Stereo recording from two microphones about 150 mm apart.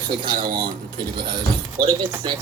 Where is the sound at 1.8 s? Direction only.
30° right (ahead or behind).